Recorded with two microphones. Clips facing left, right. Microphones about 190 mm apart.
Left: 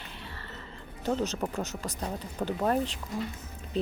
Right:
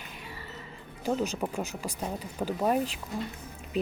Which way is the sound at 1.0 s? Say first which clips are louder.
Even; 10° right (ahead or behind).